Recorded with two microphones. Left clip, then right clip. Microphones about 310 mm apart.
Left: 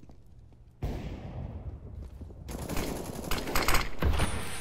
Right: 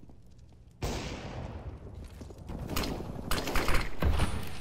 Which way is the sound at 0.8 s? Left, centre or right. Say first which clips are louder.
Right 4 dB; right.